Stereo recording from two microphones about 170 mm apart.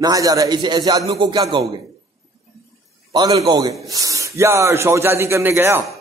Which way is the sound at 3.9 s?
20° right (ahead or behind).